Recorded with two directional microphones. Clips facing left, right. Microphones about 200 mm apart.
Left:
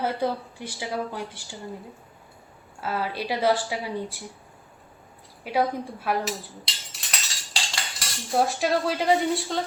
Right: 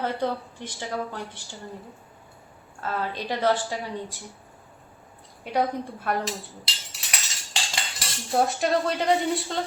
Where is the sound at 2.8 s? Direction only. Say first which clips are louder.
Left 1 dB; 10° left (ahead or behind).